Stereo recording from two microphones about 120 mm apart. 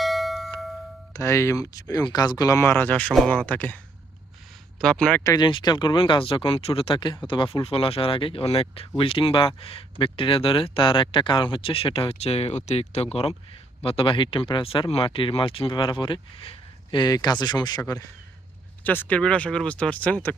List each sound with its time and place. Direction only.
0.0 s a sound: centre (ahead or behind)
1.1 s speech: 25° left (ahead or behind)
4.8 s speech: 5° left (ahead or behind)
5.2 s speech: 30° left (ahead or behind)
5.5 s speech: 40° left (ahead or behind)
18.8 s speech: 15° left (ahead or behind)